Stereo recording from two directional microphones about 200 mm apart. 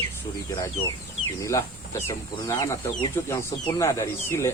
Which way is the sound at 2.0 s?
15° left (ahead or behind).